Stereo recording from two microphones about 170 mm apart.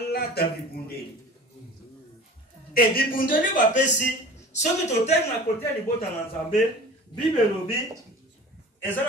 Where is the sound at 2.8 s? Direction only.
55° left (ahead or behind).